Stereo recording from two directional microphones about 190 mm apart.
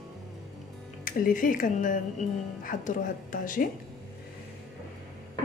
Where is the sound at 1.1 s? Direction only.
45° left (ahead or behind).